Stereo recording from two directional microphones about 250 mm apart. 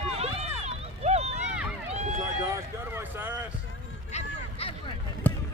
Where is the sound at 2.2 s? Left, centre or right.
Centre.